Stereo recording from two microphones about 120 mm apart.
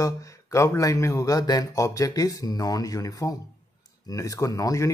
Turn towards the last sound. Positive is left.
turn(degrees=25)  # may be behind; listen again after turning